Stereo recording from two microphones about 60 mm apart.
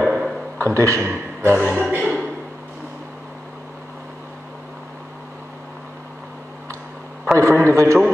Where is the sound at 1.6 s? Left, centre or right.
Right.